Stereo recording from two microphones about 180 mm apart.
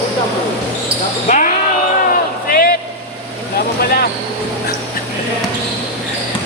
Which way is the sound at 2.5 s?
55° left (ahead or behind).